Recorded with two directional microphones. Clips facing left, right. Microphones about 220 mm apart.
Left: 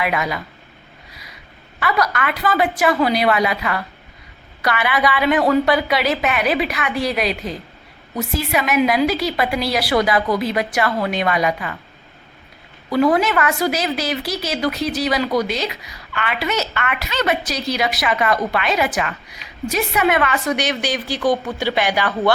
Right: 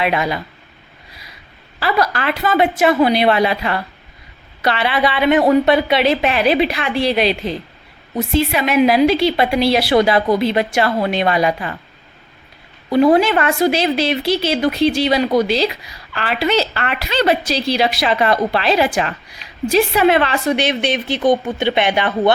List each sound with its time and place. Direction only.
0.0 s a woman's voice: 30° right (ahead or behind)
1.8 s a woman's voice: 30° right (ahead or behind)
12.9 s a woman's voice: 25° right (ahead or behind)